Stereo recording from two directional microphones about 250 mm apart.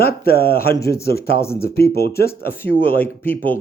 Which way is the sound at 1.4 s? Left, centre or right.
Centre.